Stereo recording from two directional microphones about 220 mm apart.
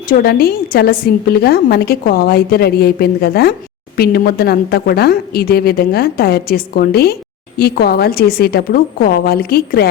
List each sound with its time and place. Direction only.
0.1 s a woman's voice: 45° left (ahead or behind)